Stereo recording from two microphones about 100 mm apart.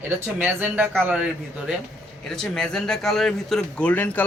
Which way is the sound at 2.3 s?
5° left (ahead or behind).